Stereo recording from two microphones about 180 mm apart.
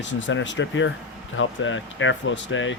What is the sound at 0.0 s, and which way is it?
Speech, 90° left.